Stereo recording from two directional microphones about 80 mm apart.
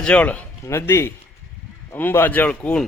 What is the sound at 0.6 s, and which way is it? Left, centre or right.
A man's voice, left.